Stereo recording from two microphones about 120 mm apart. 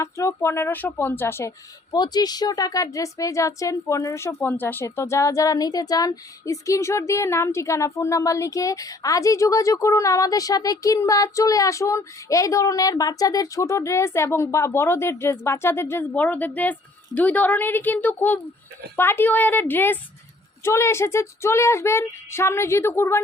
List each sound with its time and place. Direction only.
0.0 s speech: 25° left (ahead or behind)
1.9 s a woman's voice: 35° left (ahead or behind)